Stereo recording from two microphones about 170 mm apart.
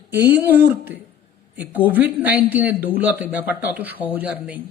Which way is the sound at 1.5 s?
10° right (ahead or behind).